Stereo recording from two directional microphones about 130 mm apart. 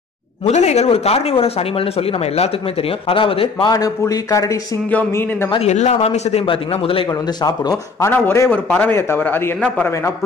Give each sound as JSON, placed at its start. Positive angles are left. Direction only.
{"t": 0.5, "sound": "speech", "side_deg": 60}
{"t": 3.7, "sound": "a man's voice", "side_deg": 25}
{"t": 5.7, "sound": "speech", "side_deg": 60}
{"t": 7.4, "sound": "speech", "side_deg": 30}
{"t": 8.1, "sound": "a man's voice", "side_deg": 15}